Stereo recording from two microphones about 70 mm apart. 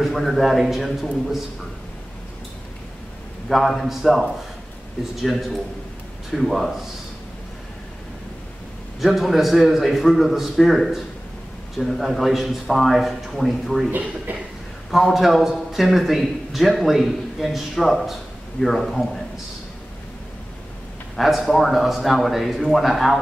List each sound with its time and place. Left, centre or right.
0.0 s a man's voice: centre
3.4 s a man's voice: centre
9.0 s a man's voice: centre
13.8 s speech: right
14.9 s a man's voice: centre
21.2 s a man's voice: centre